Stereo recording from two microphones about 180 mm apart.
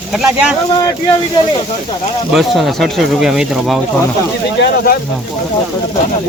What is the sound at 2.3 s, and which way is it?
Speech, centre (ahead or behind).